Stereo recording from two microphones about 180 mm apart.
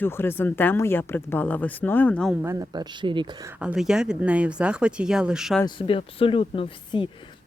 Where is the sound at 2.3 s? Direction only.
15° right (ahead or behind).